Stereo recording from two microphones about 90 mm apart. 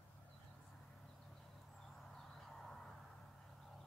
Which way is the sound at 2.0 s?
Centre (ahead or behind).